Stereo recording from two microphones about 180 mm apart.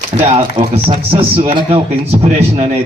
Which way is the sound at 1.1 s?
30° right (ahead or behind).